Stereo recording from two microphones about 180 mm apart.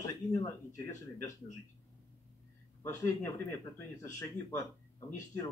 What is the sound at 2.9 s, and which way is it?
Speech, 15° left (ahead or behind).